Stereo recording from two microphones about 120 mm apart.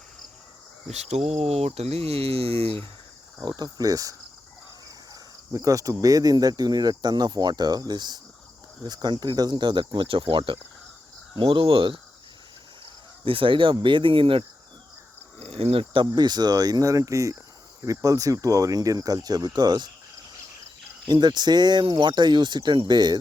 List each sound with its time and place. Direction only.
0.9 s speech: 65° right (ahead or behind)
3.4 s speech: 35° right (ahead or behind)
5.5 s speech: 30° right (ahead or behind); by 11.9 s 50° right (ahead or behind)
12.8 s cricket: 45° right (ahead or behind)
13.7 s speech: 40° right (ahead or behind)
15.4 s speech: 55° right (ahead or behind)
16.0 s speech: 35° right (ahead or behind)
21.1 s speech: 35° right (ahead or behind)